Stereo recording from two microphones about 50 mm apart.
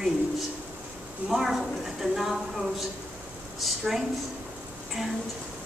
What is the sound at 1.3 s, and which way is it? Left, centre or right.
A woman's voice, centre.